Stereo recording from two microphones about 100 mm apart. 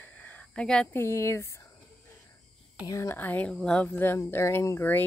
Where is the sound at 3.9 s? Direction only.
20° left (ahead or behind).